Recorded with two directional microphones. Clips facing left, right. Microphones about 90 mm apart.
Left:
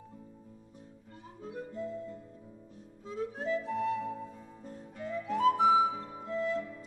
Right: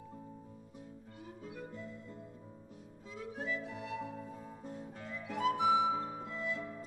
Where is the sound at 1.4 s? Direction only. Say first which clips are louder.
Left 8 dB; 35° left (ahead or behind).